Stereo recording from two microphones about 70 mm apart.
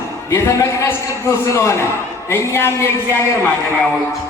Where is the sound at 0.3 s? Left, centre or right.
Left.